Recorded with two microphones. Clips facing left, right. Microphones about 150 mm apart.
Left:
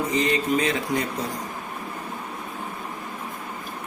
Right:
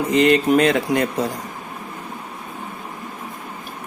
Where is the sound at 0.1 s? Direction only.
70° right (ahead or behind).